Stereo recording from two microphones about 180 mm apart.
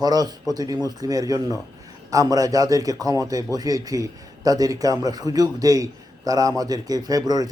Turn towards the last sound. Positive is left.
turn(degrees=-20)  # may be behind; listen again after turning